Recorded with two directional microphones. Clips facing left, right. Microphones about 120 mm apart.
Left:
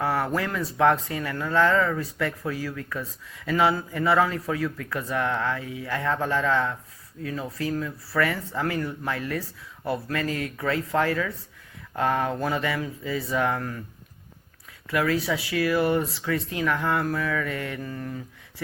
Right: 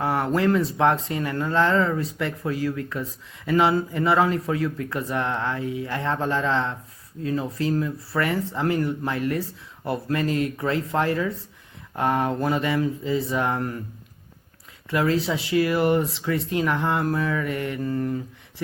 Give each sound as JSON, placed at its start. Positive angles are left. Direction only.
{"t": 0.0, "sound": "a sound", "side_deg": -20}
{"t": 0.3, "sound": "speech", "side_deg": -25}
{"t": 14.8, "sound": "speech", "side_deg": -25}
{"t": 17.8, "sound": "mantra", "side_deg": -30}